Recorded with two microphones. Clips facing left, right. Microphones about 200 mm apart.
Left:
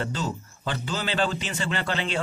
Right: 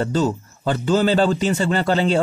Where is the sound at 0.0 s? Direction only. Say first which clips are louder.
Right 10 dB; 45° right (ahead or behind).